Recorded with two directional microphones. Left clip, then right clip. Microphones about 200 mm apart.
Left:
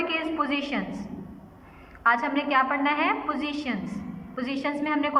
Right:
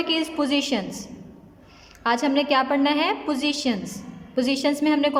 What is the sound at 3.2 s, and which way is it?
A woman's voice, 30° right (ahead or behind).